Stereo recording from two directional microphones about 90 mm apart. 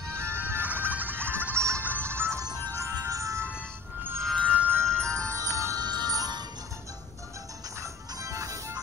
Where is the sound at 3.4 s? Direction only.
15° left (ahead or behind).